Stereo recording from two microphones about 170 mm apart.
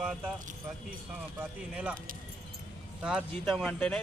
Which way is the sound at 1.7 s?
10° right (ahead or behind).